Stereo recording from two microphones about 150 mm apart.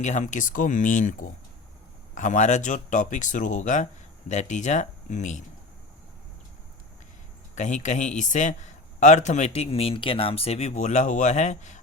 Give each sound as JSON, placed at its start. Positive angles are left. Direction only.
{"t": 0.0, "sound": "a man's voice", "side_deg": 55}
{"t": 7.5, "sound": "a man's voice", "side_deg": 55}